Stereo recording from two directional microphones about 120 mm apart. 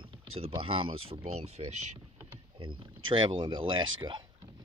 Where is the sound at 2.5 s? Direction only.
45° right (ahead or behind).